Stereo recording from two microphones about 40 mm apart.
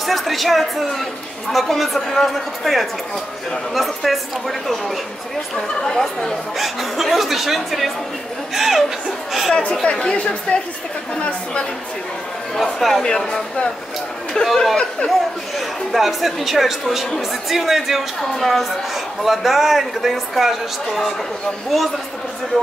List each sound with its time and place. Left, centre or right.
0.0 s a woman's voice: centre
5.8 s speech: centre
6.6 s a woman's voice: centre
9.8 s a woman's voice: left
12.7 s a woman's voice: centre
14.4 s speech: centre
15.9 s a woman's voice: centre